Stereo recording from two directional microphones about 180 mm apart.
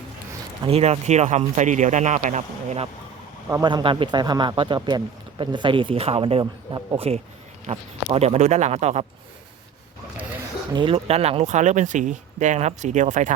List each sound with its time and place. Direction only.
0.6 s speech: 35° right (ahead or behind)
3.5 s speech: 25° right (ahead or behind)
10.7 s speech: 25° right (ahead or behind); by 13.3 s 45° right (ahead or behind)